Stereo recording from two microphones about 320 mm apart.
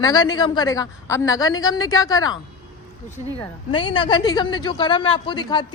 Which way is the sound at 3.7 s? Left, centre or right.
Centre.